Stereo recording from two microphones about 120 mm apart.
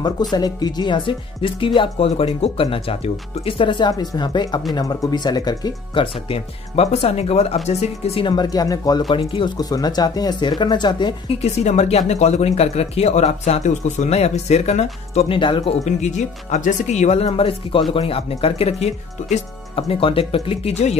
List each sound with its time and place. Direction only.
0.0 s speech: 35° left (ahead or behind)
6.2 s speech: 55° left (ahead or behind)
8.2 s speech: 40° left (ahead or behind)
9.1 s speech: 45° left (ahead or behind)
9.6 s speech: 30° left (ahead or behind)
11.6 s speech: 70° left (ahead or behind)
15.3 s speech: 45° left (ahead or behind)
15.8 s speech: 80° left
19.7 s speech: 50° left (ahead or behind)